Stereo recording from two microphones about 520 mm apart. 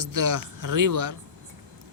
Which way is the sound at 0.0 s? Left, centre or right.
Right.